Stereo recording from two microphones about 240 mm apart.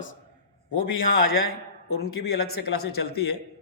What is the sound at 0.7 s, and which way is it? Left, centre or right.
A man's voice, left.